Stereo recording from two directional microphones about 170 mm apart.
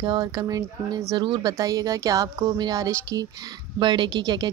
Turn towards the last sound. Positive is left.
turn(degrees=-25)  # may be behind; listen again after turning